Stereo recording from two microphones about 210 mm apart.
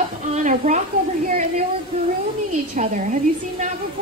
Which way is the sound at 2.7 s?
35° right (ahead or behind).